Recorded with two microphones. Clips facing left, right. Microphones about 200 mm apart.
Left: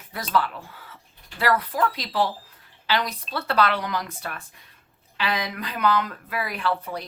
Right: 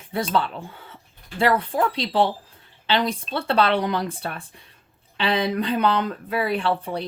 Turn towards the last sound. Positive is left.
turn(degrees=-30)  # may be behind; listen again after turning